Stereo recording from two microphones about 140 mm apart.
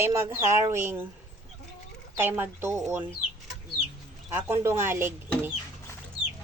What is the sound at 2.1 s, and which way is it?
Speech, 15° right (ahead or behind).